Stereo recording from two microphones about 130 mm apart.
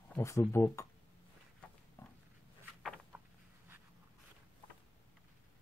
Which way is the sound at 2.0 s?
20° left (ahead or behind).